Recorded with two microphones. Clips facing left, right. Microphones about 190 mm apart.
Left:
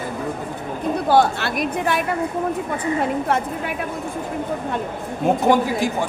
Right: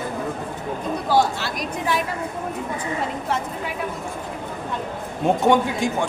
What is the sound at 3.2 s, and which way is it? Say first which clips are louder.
Speech: left 4 dB; 60° left (ahead or behind).